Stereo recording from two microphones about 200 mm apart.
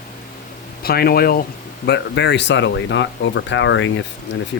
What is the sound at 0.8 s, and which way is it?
Speech, 50° left (ahead or behind).